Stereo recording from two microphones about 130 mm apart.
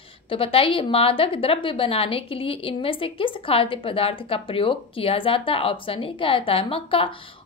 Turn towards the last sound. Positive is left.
turn(degrees=45)  # may be behind; listen again after turning